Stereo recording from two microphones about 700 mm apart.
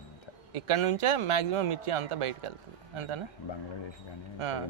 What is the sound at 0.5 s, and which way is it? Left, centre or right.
A man's voice, right.